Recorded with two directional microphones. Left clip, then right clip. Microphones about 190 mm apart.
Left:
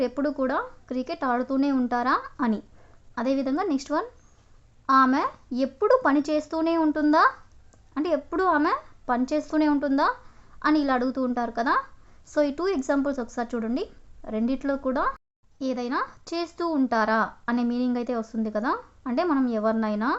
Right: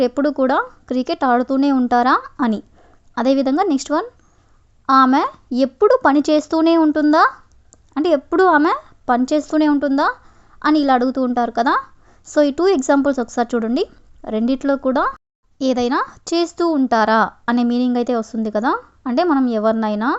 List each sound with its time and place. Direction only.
0.0 s speech: 35° right (ahead or behind)